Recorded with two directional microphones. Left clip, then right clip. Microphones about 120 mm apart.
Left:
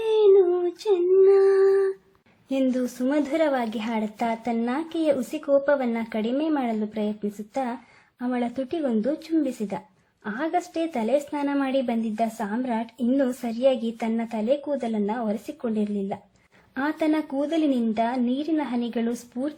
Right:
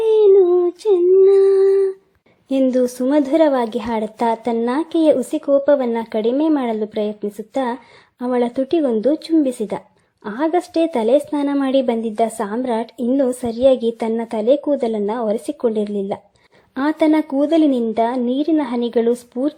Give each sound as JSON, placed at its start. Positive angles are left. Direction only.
{"t": 0.0, "sound": "child singing", "side_deg": -30}
{"t": 2.5, "sound": "a woman's voice", "side_deg": -45}
{"t": 15.2, "sound": "a woman's voice", "side_deg": -35}
{"t": 15.7, "sound": "a woman's voice", "side_deg": -50}